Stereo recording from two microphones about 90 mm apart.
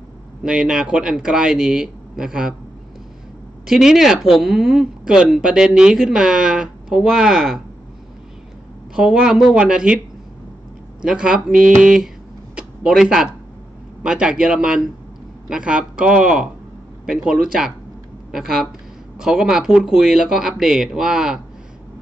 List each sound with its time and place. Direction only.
0.4 s speech: 10° right (ahead or behind)
3.6 s speech: 5° right (ahead or behind)
8.9 s speech: 10° right (ahead or behind)
11.0 s speech: 10° right (ahead or behind)
12.5 s a sound: 5° right (ahead or behind)
14.0 s speech: 10° right (ahead or behind)